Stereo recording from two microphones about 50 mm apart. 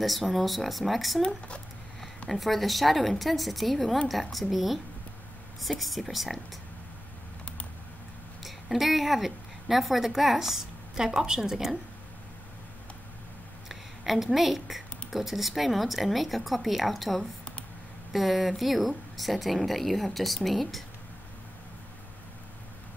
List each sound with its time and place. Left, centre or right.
0.0 s speech: centre
2.2 s speech: centre
8.4 s speech: centre
13.7 s a sound: centre
15.0 s speech: centre